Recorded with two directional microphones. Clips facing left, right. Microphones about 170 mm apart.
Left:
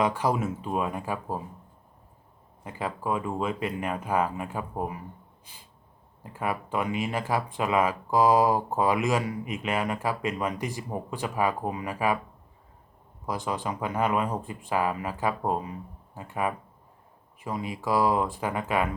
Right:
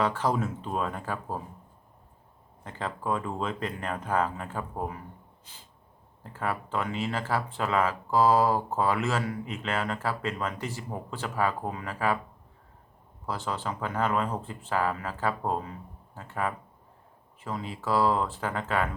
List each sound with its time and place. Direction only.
0.0 s speech: 15° left (ahead or behind)
2.6 s speech: 10° left (ahead or behind)
13.2 s speech: 15° left (ahead or behind)